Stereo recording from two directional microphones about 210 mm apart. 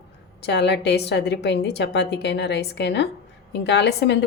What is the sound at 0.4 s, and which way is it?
A woman's voice, 55° left (ahead or behind).